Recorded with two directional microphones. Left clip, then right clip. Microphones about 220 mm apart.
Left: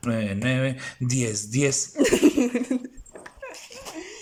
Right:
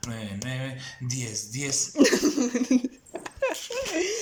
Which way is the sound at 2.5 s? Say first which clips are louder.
Right 2 dB; centre (ahead or behind).